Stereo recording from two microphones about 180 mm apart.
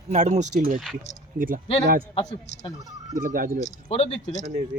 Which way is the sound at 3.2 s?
50° right (ahead or behind).